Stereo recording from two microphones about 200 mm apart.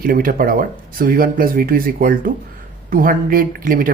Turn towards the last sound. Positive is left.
turn(degrees=-45)  # may be behind; listen again after turning